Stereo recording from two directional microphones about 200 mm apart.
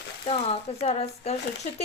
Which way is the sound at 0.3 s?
30° left (ahead or behind).